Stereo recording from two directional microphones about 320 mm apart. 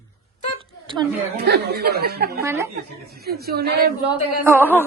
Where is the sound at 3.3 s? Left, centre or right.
Right.